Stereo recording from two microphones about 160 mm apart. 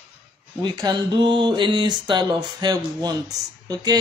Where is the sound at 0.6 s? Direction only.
25° right (ahead or behind).